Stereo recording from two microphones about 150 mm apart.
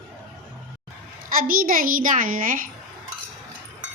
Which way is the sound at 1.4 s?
70° right (ahead or behind).